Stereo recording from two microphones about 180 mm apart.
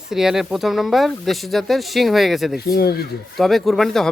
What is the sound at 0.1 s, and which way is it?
Speech, 5° right (ahead or behind).